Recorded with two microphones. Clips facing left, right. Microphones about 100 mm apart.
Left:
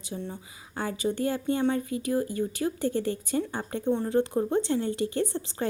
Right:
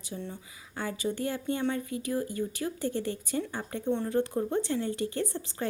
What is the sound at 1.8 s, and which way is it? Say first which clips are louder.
Speech: left 4 dB; 30° right (ahead or behind).